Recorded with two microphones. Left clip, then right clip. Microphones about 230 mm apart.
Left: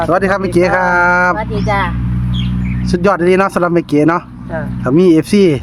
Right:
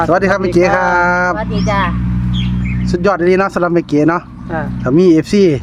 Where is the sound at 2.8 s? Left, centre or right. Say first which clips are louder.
Left 1 dB; centre.